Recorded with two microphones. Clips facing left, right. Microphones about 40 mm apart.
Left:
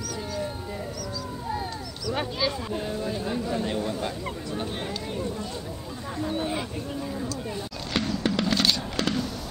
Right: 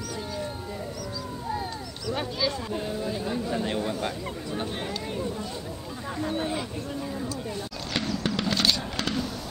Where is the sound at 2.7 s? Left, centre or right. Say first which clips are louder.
Left 1 dB; centre.